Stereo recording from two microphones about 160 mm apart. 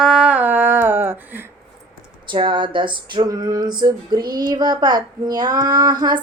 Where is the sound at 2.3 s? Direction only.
30° right (ahead or behind).